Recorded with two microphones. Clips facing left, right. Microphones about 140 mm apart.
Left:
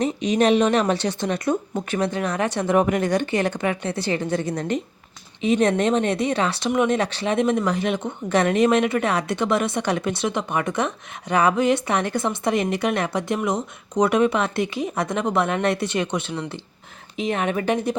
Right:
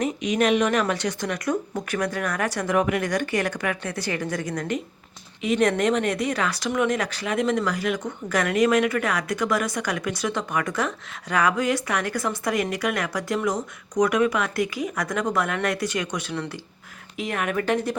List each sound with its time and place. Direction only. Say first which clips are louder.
0.0 s speech: left 3 dB; 30° left (ahead or behind)